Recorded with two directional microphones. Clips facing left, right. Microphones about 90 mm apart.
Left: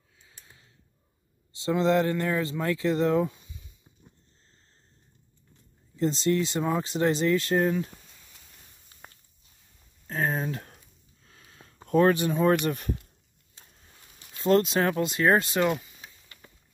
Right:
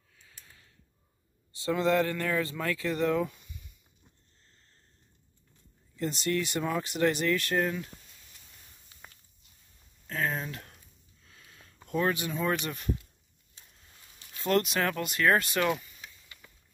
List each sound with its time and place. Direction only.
0.2 s a sound: 20° left (ahead or behind)
1.5 s speech: 25° left (ahead or behind)
5.9 s speech: 25° left (ahead or behind)
10.0 s a sound: 30° left (ahead or behind); by 13.1 s 50° left (ahead or behind)
14.3 s speech: 25° left (ahead or behind)
16.3 s printer: 30° left (ahead or behind)